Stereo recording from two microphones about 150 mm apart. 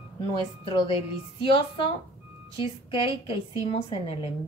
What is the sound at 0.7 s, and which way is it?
Speech, 30° left (ahead or behind).